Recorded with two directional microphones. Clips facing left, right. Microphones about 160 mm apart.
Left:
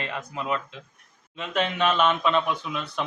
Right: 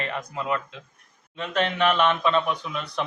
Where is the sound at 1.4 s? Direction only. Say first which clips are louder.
Right 1 dB; 10° left (ahead or behind).